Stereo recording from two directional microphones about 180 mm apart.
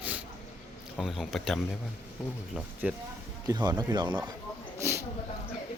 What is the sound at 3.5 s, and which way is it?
Speech, 20° right (ahead or behind).